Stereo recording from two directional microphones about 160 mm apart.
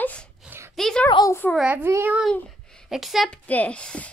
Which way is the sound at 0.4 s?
15° right (ahead or behind).